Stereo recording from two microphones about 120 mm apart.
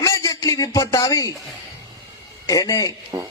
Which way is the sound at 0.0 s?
25° left (ahead or behind).